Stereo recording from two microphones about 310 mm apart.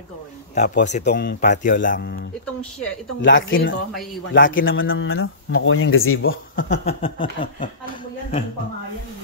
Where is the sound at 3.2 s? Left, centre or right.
Left.